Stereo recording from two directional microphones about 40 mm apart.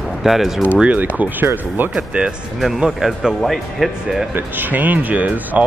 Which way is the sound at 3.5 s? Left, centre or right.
Centre.